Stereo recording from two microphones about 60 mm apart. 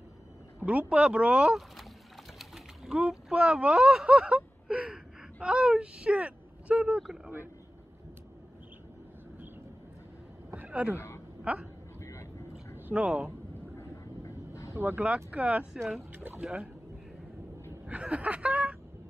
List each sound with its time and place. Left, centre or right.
0.7 s speech: right
2.3 s sewing machine: centre
3.0 s speech: centre
10.7 s speech: right
11.0 s a sound: left
11.5 s speech: right
12.0 s vehicle: left
12.9 s speech: right
13.7 s vehicle: left
14.8 s speech: right
15.3 s speech: right
17.8 s speech: right